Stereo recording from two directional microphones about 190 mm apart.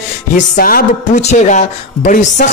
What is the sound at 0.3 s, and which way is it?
Speech, 45° left (ahead or behind).